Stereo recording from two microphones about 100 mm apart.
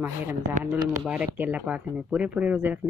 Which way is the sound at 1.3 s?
15° right (ahead or behind).